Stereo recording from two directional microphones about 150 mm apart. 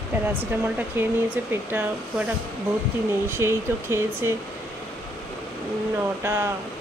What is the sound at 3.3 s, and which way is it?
Speech, 15° right (ahead or behind).